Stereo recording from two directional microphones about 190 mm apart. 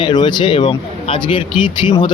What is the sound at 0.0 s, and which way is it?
A man's voice, 25° left (ahead or behind).